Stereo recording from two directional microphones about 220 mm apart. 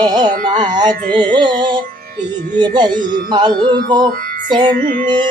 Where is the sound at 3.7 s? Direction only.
20° right (ahead or behind).